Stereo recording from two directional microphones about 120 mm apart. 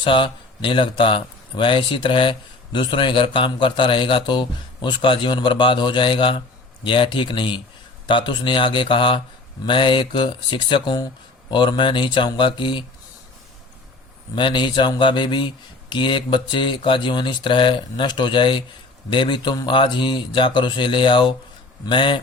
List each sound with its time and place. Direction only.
0.0 s a man's voice: 45° left (ahead or behind)
14.3 s a man's voice: 40° left (ahead or behind)